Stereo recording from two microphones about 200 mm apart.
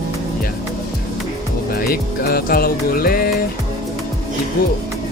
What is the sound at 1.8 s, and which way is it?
Music, 50° left (ahead or behind).